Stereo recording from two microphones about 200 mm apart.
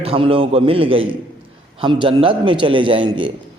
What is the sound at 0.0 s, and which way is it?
A man's voice, 30° right (ahead or behind).